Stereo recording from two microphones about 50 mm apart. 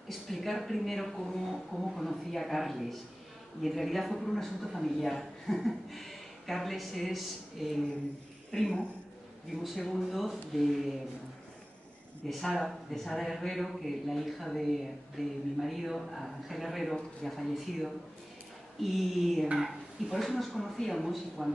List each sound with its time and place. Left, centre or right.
0.1 s a man's voice: centre
9.6 s a man's voice: centre
12.3 s a man's voice: centre